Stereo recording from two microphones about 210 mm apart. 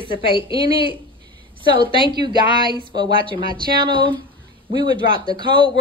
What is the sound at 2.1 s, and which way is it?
Speech, 20° right (ahead or behind).